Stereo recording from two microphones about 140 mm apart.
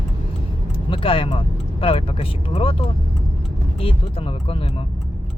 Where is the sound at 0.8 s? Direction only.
40° left (ahead or behind).